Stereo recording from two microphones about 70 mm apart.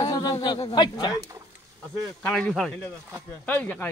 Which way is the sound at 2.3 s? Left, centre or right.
Centre.